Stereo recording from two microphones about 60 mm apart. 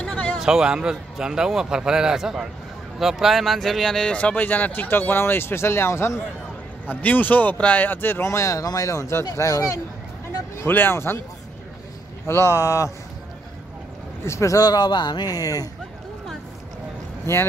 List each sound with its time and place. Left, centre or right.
0.4 s a man's voice: centre
4.2 s speech: left
6.9 s speech: left
8.2 s speech: left
10.6 s speech: left
12.3 s speech: left
14.2 s speech: left
15.2 s speech: left
17.3 s speech: left